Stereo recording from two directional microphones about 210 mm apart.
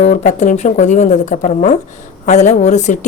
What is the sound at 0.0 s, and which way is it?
Speech, 35° left (ahead or behind).